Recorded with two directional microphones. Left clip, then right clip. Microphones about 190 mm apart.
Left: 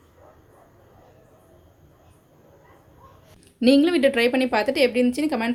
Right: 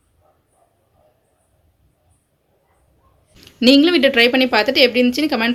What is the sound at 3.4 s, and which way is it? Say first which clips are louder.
Speech: right 5 dB; 5° left (ahead or behind).